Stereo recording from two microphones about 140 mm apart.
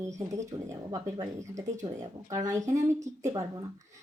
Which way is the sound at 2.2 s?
25° right (ahead or behind).